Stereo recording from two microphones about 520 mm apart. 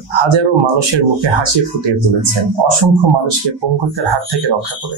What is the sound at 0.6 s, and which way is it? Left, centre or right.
Speech, right.